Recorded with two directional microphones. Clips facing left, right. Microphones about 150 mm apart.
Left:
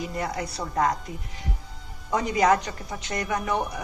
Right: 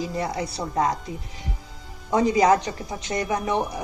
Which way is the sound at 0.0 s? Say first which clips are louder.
Right 3 dB; 30° right (ahead or behind).